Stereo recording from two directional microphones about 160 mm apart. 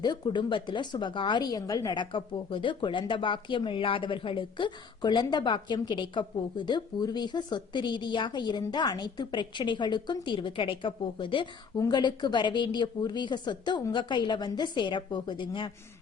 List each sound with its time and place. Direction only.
0.0 s a woman's voice: 30° left (ahead or behind)